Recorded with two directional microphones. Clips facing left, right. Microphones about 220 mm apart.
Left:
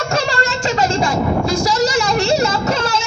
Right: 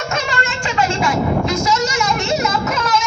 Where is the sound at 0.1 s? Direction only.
35° left (ahead or behind).